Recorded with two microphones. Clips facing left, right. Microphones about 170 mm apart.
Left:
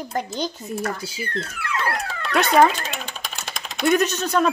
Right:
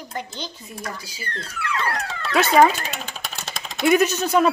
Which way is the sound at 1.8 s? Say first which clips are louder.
Left 2 dB; centre (ahead or behind).